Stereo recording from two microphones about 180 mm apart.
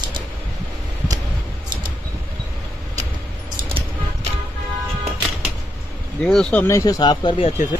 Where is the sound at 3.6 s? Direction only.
30° right (ahead or behind).